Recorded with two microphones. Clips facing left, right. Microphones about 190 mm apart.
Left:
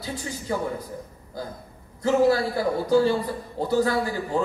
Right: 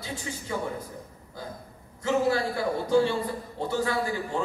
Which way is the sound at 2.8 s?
40° left (ahead or behind).